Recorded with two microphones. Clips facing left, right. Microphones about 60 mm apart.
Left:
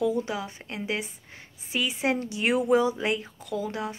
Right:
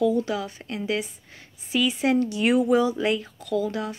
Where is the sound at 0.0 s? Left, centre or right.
Left.